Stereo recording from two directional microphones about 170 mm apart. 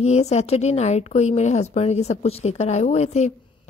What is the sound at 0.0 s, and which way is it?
Speech, 40° left (ahead or behind).